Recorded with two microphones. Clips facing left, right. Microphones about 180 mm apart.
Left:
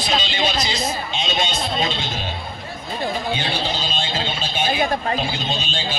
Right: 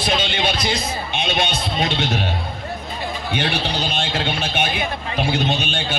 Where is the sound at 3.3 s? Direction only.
65° right (ahead or behind).